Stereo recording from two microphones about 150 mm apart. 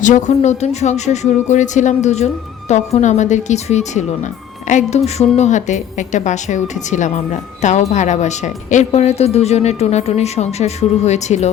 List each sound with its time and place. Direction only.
0.0 s a woman's voice: 55° left (ahead or behind)